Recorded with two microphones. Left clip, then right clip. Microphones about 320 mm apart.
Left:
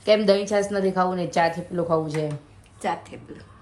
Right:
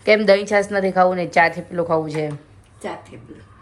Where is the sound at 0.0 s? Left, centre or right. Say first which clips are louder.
Right 4 dB; centre.